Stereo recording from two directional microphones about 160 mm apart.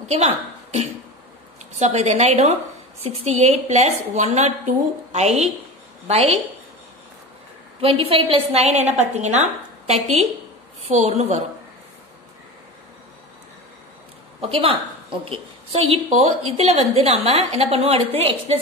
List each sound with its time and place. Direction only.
0.1 s a woman's voice: 40° right (ahead or behind)
6.0 s a woman's voice: 40° right (ahead or behind)
7.8 s a woman's voice: 35° right (ahead or behind)
14.5 s a woman's voice: 35° right (ahead or behind)